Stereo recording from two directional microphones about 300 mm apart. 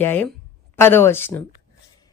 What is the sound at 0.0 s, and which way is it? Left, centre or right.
A woman's voice, centre.